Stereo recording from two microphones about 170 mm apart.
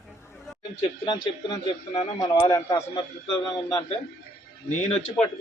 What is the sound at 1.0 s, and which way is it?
Speech, 30° left (ahead or behind).